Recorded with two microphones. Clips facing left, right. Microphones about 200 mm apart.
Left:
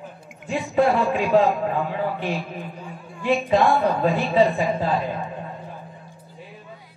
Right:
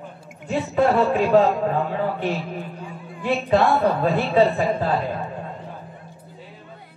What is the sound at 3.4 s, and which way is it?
A woman's voice, 15° left (ahead or behind).